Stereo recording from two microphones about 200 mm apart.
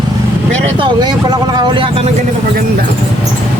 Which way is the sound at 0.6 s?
25° right (ahead or behind).